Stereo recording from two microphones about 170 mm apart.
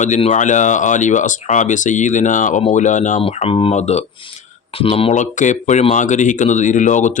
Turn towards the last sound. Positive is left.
turn(degrees=45)  # may be behind; listen again after turning